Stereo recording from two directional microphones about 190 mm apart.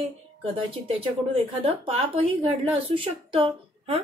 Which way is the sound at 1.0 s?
30° right (ahead or behind).